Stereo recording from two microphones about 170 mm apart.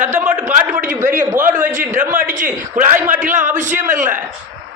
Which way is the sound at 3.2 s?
45° right (ahead or behind).